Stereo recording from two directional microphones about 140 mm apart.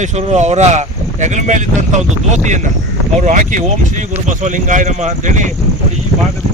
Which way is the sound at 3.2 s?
65° right (ahead or behind).